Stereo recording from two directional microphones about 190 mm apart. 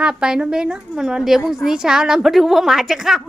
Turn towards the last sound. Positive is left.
turn(degrees=0)  # may be behind; listen again after turning